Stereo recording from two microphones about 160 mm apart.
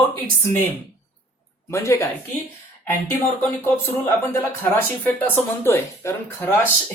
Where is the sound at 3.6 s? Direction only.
15° left (ahead or behind).